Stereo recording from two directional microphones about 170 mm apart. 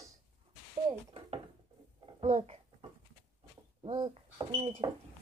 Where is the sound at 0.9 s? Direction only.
30° right (ahead or behind).